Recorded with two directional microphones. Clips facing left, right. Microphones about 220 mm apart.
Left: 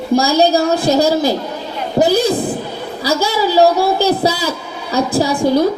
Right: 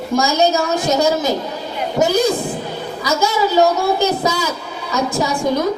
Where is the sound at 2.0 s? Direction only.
30° left (ahead or behind).